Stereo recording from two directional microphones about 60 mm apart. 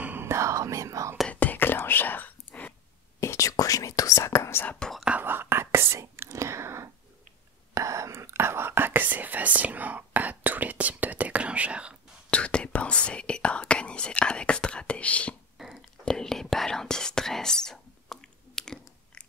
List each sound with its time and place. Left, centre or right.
0.2 s whispering: right
1.3 s whispering: left
3.2 s whispering: left
4.6 s whispering: centre
5.2 s whispering: right
7.7 s whispering: right; by 12.0 s centre
12.3 s whispering: centre
15.5 s whispering: centre
16.1 s whispering: centre